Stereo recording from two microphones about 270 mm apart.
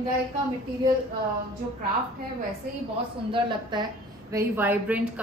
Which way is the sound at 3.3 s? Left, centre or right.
Centre.